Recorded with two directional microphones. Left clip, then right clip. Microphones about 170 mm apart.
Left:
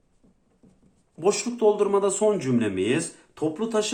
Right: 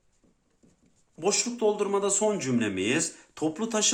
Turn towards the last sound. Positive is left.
turn(degrees=-30)  # may be behind; listen again after turning